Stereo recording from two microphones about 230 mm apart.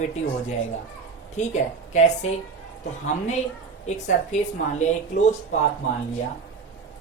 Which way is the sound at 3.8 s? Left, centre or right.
Left.